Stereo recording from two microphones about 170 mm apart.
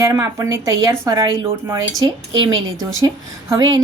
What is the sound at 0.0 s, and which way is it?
Speech, 20° right (ahead or behind).